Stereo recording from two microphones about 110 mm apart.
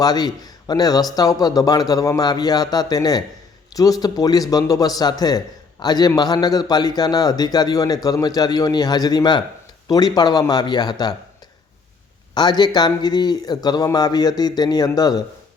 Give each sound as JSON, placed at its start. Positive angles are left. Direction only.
{"t": 0.0, "sound": "a man's voice", "side_deg": 35}
{"t": 12.3, "sound": "a man's voice", "side_deg": 40}